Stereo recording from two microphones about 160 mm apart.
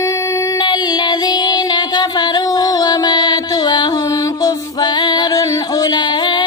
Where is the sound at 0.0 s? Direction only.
20° left (ahead or behind).